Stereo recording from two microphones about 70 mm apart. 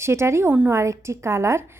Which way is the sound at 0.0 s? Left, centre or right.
Right.